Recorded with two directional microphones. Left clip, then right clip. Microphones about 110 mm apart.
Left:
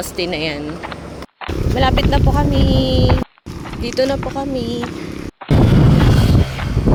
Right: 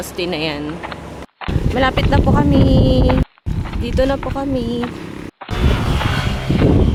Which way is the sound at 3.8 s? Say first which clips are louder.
Even; 25° right (ahead or behind).